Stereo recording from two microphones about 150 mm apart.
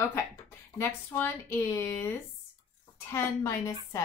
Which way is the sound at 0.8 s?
15° left (ahead or behind).